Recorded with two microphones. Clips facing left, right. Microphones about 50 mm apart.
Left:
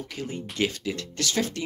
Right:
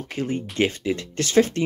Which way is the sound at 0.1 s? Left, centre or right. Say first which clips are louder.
Right 7 dB; right.